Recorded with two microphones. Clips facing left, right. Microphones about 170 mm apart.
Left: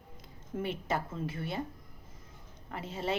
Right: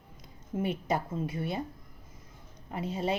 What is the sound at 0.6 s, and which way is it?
A woman's voice, 15° right (ahead or behind).